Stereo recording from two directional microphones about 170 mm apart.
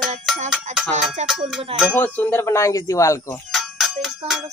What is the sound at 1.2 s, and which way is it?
Speech, 40° right (ahead or behind).